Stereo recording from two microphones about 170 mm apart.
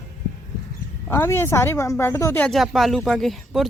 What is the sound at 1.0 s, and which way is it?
Speech, 10° left (ahead or behind).